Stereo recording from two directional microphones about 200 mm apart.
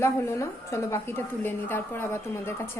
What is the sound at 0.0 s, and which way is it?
A woman's voice, 15° left (ahead or behind).